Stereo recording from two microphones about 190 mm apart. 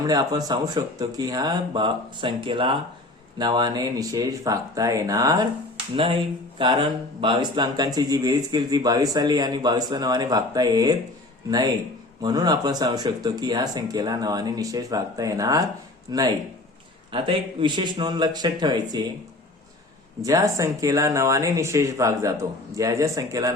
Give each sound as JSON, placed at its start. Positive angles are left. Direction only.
{"t": 0.0, "sound": "speech", "side_deg": -20}
{"t": 20.2, "sound": "speech", "side_deg": -15}